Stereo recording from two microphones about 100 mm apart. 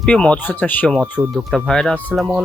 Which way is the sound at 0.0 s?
10° left (ahead or behind).